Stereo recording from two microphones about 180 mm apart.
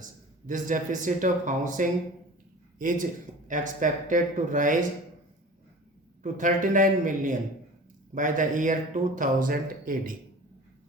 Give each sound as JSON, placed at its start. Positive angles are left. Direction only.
{"t": 0.0, "sound": "speech", "side_deg": -45}
{"t": 6.2, "sound": "speech", "side_deg": -45}